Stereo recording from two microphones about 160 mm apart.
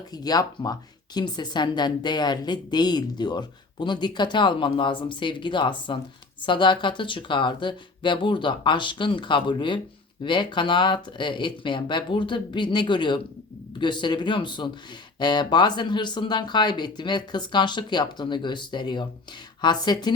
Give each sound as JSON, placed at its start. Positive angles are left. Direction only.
{"t": 0.1, "sound": "speech", "side_deg": 25}